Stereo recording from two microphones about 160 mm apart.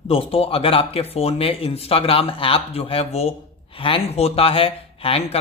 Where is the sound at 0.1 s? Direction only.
35° left (ahead or behind).